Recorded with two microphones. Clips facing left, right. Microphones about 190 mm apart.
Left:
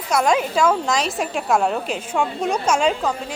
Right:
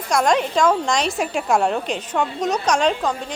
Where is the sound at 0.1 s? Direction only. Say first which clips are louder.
Even; 5° left (ahead or behind).